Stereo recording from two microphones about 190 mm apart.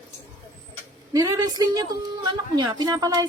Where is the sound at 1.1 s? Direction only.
20° right (ahead or behind).